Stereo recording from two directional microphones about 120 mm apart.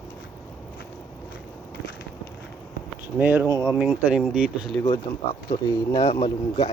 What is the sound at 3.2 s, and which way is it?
Speech, 15° right (ahead or behind).